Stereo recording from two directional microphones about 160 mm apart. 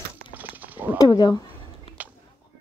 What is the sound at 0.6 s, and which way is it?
Wild animals, 10° right (ahead or behind).